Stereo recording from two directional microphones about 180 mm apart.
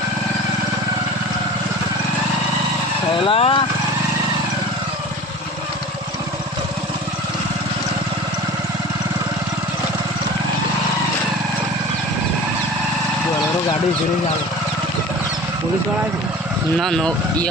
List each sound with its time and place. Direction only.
3.2 s speech: 30° left (ahead or behind)
16.7 s speech: 5° left (ahead or behind)